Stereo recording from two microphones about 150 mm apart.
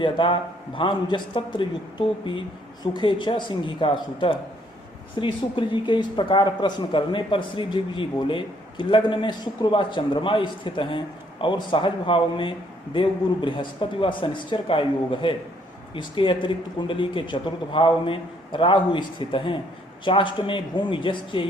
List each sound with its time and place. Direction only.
0.0 s a man's voice: 35° left (ahead or behind)
5.2 s a man's voice: 35° left (ahead or behind)